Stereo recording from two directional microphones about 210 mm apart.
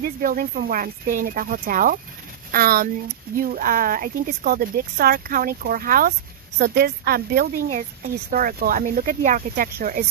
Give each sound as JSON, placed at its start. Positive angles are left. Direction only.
{"t": 0.0, "sound": "speech", "side_deg": -45}